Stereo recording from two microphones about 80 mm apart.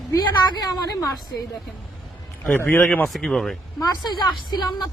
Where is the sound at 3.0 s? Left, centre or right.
Centre.